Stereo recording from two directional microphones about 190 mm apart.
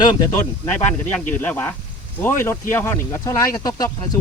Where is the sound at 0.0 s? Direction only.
20° left (ahead or behind).